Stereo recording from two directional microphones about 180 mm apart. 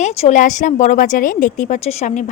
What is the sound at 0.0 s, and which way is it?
A woman's voice, 40° left (ahead or behind).